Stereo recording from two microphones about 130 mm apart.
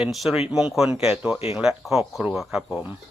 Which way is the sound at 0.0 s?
Centre (ahead or behind).